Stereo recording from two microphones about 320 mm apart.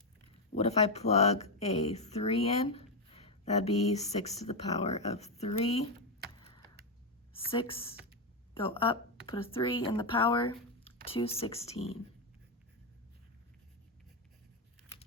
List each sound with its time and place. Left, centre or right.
0.5 s speech: centre
7.3 s speech: centre